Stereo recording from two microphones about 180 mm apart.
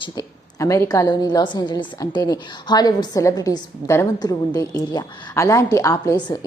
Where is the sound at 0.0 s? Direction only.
20° left (ahead or behind).